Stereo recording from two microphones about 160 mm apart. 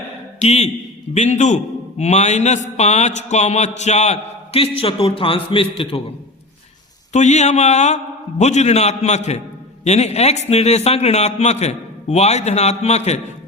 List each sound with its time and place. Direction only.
0.3 s a man's voice: 40° left (ahead or behind)
7.1 s a man's voice: 45° left (ahead or behind)